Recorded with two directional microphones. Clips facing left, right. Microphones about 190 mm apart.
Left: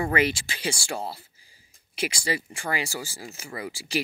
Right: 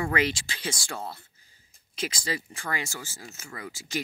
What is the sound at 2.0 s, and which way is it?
Speech, 10° left (ahead or behind).